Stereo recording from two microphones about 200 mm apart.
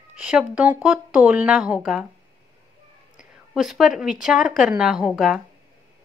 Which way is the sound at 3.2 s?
5° right (ahead or behind).